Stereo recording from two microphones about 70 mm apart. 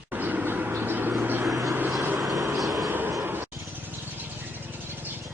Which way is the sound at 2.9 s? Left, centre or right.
Right.